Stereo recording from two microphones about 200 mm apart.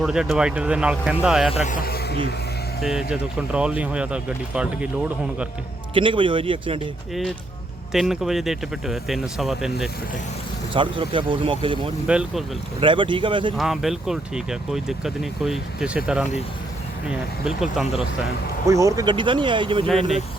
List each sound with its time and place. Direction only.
0.0 s speech: centre (ahead or behind)
1.5 s speech: 40° left (ahead or behind)
3.1 s speech: 5° right (ahead or behind)
5.9 s speech: 25° right (ahead or behind)
7.9 s speech: centre (ahead or behind)
10.8 s speech: 25° right (ahead or behind)
12.0 s speech: 5° right (ahead or behind)
12.8 s speech: 25° right (ahead or behind)
13.6 s speech: centre (ahead or behind)
18.6 s speech: 15° right (ahead or behind)